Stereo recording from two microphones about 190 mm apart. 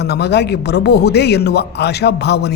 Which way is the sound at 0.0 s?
60° left (ahead or behind).